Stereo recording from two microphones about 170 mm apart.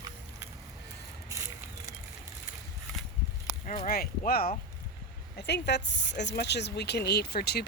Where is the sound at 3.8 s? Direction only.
60° left (ahead or behind).